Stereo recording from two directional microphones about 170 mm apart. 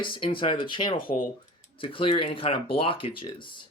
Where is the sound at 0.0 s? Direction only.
30° left (ahead or behind).